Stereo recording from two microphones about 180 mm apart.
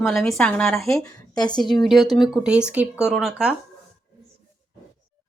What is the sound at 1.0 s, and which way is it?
Speech, 20° left (ahead or behind).